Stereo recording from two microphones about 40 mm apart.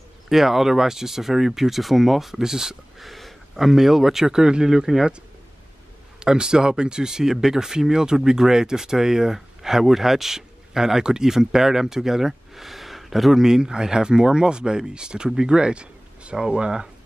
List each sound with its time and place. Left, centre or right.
0.3 s speech: centre
3.0 s speech: centre
6.1 s speech: centre
13.5 s speech: centre